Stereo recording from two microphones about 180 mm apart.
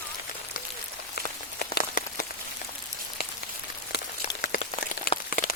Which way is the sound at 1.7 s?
50° left (ahead or behind).